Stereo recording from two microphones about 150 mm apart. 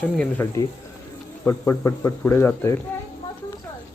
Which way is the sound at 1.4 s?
20° left (ahead or behind).